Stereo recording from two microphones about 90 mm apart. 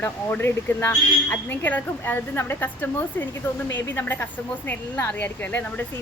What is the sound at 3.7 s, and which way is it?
A man's voice, 20° left (ahead or behind).